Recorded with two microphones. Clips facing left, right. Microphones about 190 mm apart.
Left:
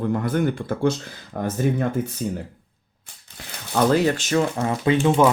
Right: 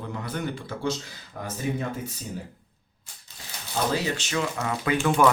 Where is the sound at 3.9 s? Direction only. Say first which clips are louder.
Left 8 dB; 55° left (ahead or behind).